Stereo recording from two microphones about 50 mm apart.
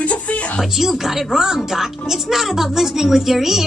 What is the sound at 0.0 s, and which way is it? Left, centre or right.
Music, left.